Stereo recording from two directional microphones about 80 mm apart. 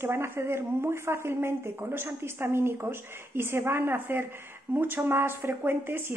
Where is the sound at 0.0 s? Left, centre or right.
Right.